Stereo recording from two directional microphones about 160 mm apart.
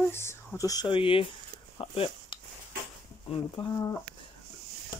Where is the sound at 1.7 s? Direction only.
35° left (ahead or behind).